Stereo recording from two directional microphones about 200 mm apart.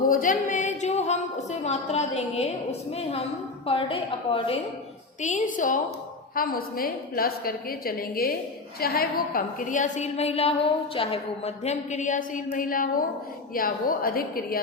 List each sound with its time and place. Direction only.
0.1 s a woman's voice: 40° left (ahead or behind); by 4.5 s 25° left (ahead or behind)
5.2 s a woman's voice: 40° left (ahead or behind)